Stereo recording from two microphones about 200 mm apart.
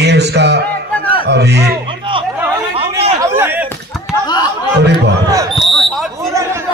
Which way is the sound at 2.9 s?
15° right (ahead or behind).